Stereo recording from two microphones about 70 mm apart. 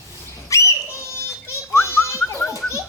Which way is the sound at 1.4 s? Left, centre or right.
Left.